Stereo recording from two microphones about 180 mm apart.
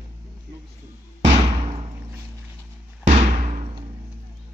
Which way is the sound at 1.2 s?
35° right (ahead or behind).